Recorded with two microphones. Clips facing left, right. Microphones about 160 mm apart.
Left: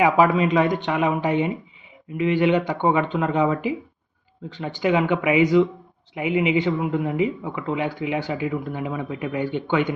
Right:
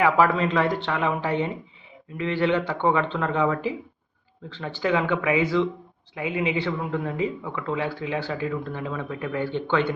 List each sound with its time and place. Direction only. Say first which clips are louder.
0.0 s speech: left 3 dB; 15° left (ahead or behind)